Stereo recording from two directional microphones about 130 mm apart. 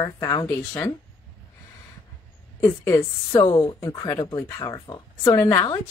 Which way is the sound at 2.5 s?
25° left (ahead or behind).